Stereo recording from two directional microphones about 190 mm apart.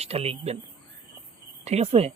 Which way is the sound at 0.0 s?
30° right (ahead or behind).